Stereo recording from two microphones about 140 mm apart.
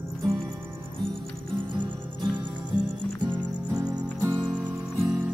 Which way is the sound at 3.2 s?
30° right (ahead or behind).